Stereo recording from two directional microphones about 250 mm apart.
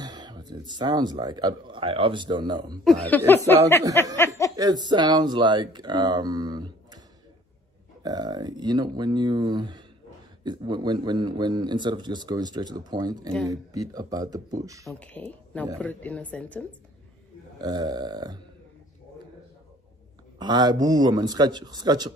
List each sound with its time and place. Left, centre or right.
0.0 s speech: centre
2.8 s speech: centre
4.0 s snicker: centre
4.6 s speech: centre
8.0 s speech: centre
14.9 s speech: centre
17.6 s speech: centre
20.3 s speech: centre